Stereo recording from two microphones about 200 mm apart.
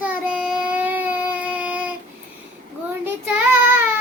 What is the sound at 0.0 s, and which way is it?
Child singing, 5° right (ahead or behind).